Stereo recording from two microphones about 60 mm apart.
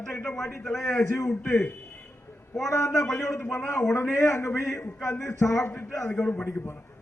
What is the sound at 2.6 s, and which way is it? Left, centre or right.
Speech, left.